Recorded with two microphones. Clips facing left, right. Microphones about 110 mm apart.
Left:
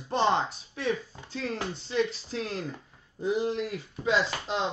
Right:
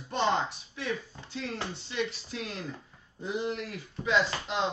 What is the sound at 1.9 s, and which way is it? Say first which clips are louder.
Speech: left 7 dB; 35° left (ahead or behind).